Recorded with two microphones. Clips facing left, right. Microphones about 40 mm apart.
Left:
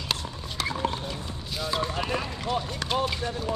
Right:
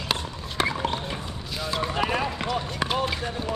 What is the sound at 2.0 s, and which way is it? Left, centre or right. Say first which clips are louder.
Run: right 4 dB; right.